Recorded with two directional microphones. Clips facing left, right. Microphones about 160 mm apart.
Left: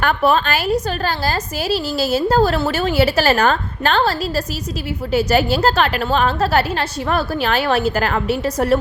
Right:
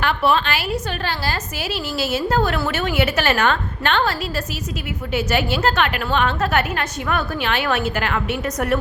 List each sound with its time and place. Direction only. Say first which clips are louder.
0.0 s a woman's voice: left 3 dB; 45° left (ahead or behind)